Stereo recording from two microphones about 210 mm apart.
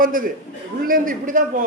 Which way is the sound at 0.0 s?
40° right (ahead or behind).